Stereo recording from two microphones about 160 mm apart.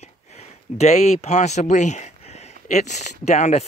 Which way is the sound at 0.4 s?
45° left (ahead or behind).